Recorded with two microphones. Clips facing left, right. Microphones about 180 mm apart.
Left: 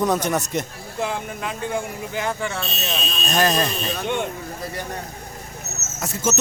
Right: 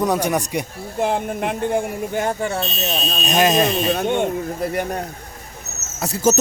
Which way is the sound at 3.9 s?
50° right (ahead or behind).